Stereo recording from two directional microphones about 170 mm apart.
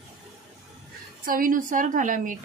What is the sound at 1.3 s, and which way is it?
A woman's voice, 55° right (ahead or behind).